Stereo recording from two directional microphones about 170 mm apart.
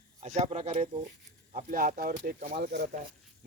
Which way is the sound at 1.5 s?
50° right (ahead or behind).